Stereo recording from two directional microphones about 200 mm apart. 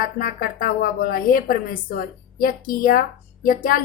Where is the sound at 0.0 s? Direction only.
45° left (ahead or behind).